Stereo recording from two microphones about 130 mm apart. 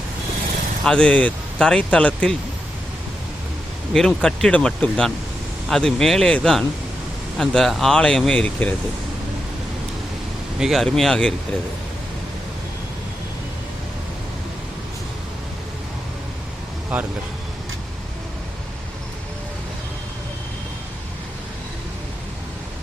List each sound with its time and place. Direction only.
0.9 s speech: 5° left (ahead or behind)
3.9 s speech: 5° left (ahead or behind)
10.6 s speech: centre (ahead or behind)
16.9 s speech: 10° right (ahead or behind)